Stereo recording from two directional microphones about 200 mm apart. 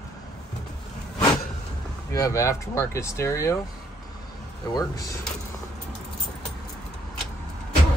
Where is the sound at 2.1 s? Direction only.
15° left (ahead or behind).